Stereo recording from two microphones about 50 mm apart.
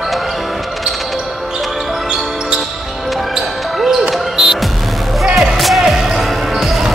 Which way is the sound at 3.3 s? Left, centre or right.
Centre.